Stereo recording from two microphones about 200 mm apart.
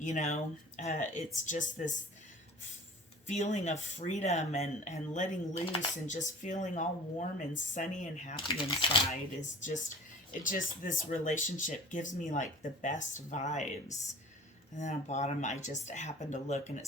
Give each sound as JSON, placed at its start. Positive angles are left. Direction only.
{"t": 0.0, "sound": "speech", "side_deg": 40}
{"t": 3.2, "sound": "speech", "side_deg": 35}
{"t": 8.4, "sound": "speech", "side_deg": 25}
{"t": 9.4, "sound": "speech", "side_deg": 40}